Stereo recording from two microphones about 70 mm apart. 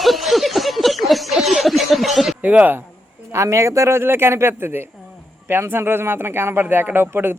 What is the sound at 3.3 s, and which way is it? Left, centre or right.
Speech, right.